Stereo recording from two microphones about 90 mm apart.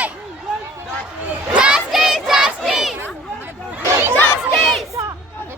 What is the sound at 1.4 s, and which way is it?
Crowd, 10° right (ahead or behind).